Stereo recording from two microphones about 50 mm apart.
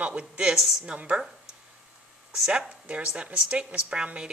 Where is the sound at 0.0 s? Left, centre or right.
Right.